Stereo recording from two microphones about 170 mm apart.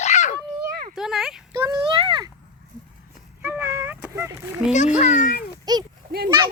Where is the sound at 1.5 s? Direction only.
25° right (ahead or behind).